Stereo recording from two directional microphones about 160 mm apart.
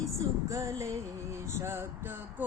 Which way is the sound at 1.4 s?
15° right (ahead or behind).